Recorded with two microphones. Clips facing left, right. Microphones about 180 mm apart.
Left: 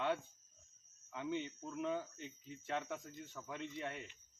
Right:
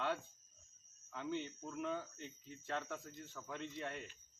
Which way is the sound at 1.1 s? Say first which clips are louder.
Left 1 dB; 20° left (ahead or behind).